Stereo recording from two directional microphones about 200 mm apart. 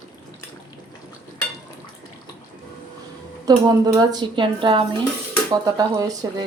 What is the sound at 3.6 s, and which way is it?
A woman's voice, 20° right (ahead or behind).